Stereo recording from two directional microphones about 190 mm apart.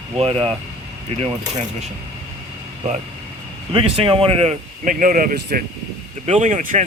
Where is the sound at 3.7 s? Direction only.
30° right (ahead or behind); by 5.6 s 45° right (ahead or behind).